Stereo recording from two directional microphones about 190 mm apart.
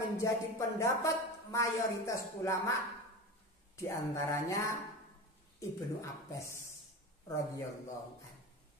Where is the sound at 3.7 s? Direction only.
15° left (ahead or behind).